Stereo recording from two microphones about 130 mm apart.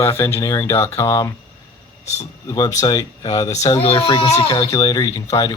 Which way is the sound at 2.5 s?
25° left (ahead or behind).